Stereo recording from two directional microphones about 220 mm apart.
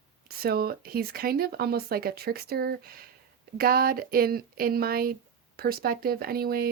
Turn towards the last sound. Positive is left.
turn(degrees=-45)  # may be behind; listen again after turning